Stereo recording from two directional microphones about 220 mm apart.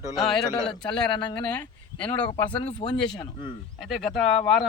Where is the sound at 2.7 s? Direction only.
25° left (ahead or behind).